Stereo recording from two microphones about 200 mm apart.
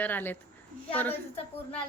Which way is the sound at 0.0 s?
10° left (ahead or behind).